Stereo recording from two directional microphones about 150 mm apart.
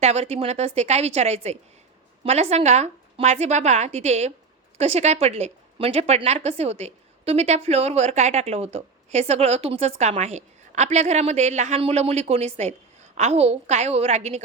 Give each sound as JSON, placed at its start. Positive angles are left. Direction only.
{"t": 0.0, "sound": "a woman's voice", "side_deg": -45}